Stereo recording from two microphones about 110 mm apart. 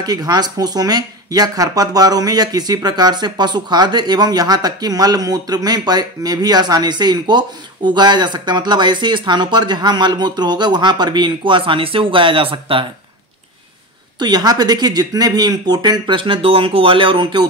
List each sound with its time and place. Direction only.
0.0 s speech: 35° right (ahead or behind); by 12.8 s 55° right (ahead or behind)
14.1 s speech: 40° right (ahead or behind)